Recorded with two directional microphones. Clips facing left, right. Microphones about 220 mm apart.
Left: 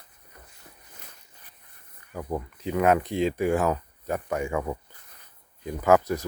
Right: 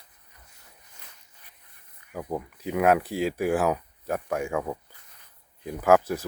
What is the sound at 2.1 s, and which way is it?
Speech, 10° right (ahead or behind).